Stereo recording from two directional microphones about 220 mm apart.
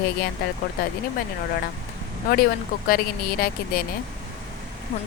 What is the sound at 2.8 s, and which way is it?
Speech, 40° left (ahead or behind).